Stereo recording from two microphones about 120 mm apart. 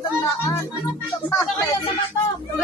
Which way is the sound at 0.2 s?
20° left (ahead or behind).